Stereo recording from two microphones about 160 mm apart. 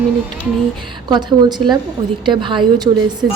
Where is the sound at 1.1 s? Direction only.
25° right (ahead or behind).